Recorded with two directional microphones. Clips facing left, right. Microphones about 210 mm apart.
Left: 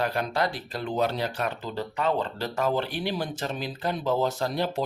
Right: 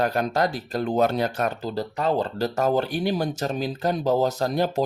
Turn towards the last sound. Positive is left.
turn(degrees=-45)  # may be behind; listen again after turning